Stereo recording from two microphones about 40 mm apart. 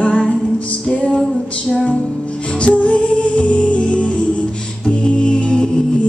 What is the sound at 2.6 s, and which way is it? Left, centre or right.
Music, left.